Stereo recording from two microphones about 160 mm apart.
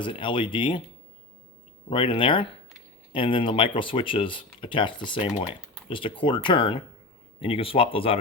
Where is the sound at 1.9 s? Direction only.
30° left (ahead or behind).